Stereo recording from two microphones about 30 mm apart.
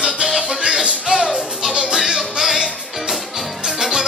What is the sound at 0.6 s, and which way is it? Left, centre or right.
Music, right.